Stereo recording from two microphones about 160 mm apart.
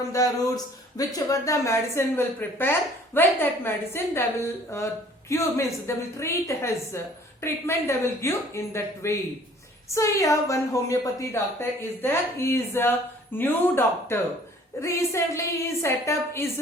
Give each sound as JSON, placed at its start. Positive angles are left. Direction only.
{"t": 0.1, "sound": "speech", "side_deg": 20}